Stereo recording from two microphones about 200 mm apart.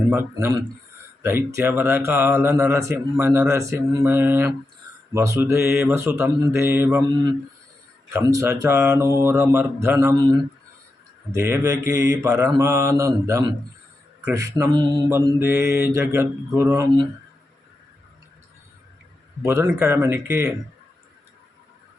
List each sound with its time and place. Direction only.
0.1 s speech: 10° right (ahead or behind)
8.1 s speech: 15° right (ahead or behind)
11.3 s speech: 15° right (ahead or behind)
19.4 s speech: 15° right (ahead or behind)